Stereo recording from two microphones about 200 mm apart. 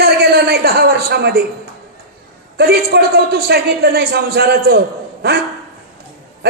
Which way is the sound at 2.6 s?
50° right (ahead or behind).